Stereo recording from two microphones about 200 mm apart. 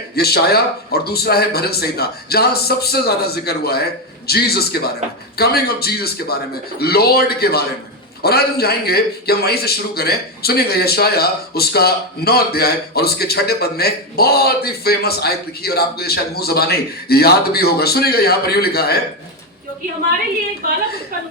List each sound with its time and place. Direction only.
0.2 s a man's voice: 50° left (ahead or behind)